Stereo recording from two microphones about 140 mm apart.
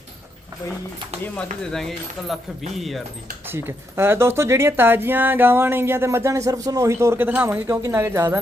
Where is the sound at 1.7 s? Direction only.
Centre (ahead or behind).